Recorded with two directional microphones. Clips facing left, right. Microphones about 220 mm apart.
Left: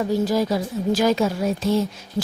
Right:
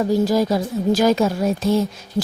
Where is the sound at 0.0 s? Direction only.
40° right (ahead or behind).